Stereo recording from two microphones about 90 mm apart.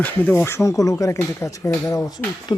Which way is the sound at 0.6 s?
40° left (ahead or behind).